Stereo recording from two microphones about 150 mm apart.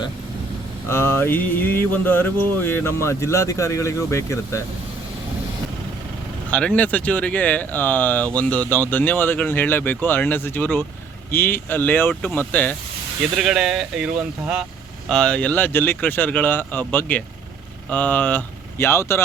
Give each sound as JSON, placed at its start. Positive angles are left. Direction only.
{"t": 0.9, "sound": "speech", "side_deg": 15}
{"t": 6.5, "sound": "speech", "side_deg": 10}
{"t": 13.3, "sound": "speech", "side_deg": -5}